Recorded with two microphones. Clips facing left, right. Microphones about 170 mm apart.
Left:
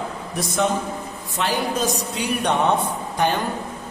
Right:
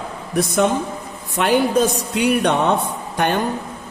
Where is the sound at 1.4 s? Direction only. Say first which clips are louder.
Right 7 dB; 60° right (ahead or behind).